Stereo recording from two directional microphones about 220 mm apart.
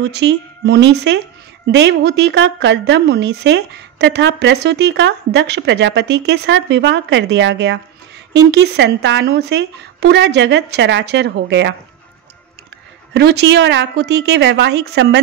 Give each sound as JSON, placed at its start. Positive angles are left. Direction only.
{"t": 0.0, "sound": "a woman's voice", "side_deg": -50}
{"t": 13.1, "sound": "a woman's voice", "side_deg": -50}